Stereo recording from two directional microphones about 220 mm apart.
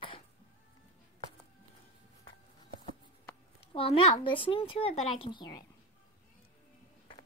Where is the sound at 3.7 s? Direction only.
25° left (ahead or behind).